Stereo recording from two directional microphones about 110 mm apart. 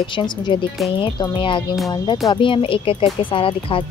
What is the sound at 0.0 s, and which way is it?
Speech, 50° left (ahead or behind).